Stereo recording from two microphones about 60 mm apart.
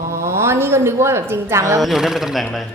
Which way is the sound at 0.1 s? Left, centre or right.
Right.